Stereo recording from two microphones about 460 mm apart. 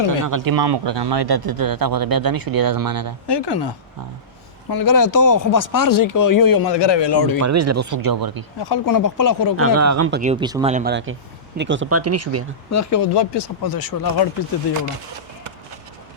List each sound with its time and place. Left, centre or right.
0.3 s a man's voice: right
3.2 s speech: left
4.7 s speech: left
7.3 s speech: right
8.6 s speech: left
9.6 s speech: right
10.1 s speech: centre; by 12.5 s right
12.7 s speech: left
13.1 s speech: left